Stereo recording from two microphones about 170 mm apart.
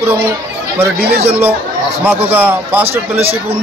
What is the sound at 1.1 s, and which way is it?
Speech, 35° right (ahead or behind).